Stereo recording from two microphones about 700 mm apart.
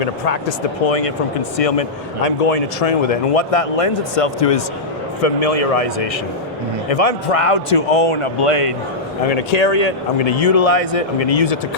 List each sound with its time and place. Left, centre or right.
0.0 s a man's voice: left
9.2 s speech: left